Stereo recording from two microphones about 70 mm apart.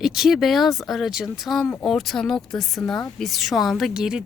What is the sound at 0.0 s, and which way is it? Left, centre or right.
Speech, centre.